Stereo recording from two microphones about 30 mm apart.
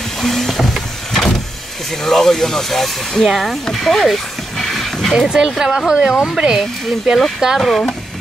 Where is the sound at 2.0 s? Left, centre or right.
Centre.